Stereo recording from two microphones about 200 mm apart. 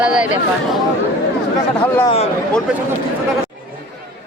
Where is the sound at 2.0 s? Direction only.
30° left (ahead or behind).